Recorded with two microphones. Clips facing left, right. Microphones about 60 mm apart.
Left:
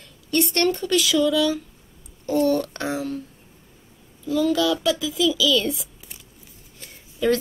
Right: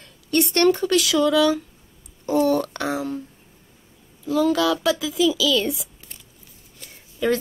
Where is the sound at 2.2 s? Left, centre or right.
Centre.